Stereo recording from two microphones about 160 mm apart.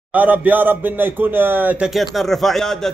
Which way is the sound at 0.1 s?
10° right (ahead or behind).